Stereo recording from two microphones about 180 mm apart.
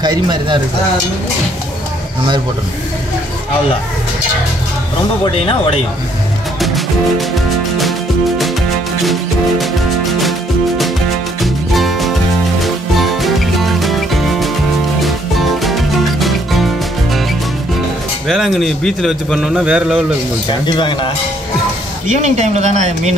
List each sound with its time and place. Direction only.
0.0 s speech: 25° right (ahead or behind)
5.2 s speech: 30° left (ahead or behind)
6.6 s music: centre (ahead or behind)
9.0 s music: centre (ahead or behind)
11.4 s music: centre (ahead or behind)
18.3 s a man's voice: centre (ahead or behind)
20.4 s speech: 25° left (ahead or behind)
22.0 s speech: 40° right (ahead or behind)